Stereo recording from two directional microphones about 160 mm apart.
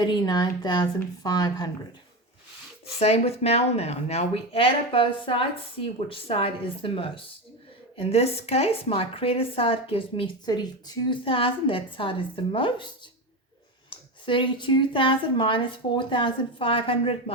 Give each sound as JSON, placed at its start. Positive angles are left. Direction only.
{"t": 0.0, "sound": "speech", "side_deg": 25}
{"t": 3.0, "sound": "a woman's voice", "side_deg": 40}
{"t": 14.3, "sound": "a woman's voice", "side_deg": 30}